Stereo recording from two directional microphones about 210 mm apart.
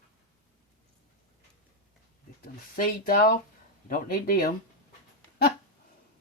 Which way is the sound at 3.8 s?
45° left (ahead or behind).